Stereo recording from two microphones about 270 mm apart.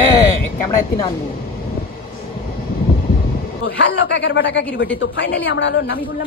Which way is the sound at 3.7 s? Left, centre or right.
Left.